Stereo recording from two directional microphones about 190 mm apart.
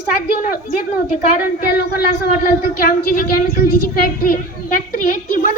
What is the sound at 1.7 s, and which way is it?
Speech, 55° left (ahead or behind).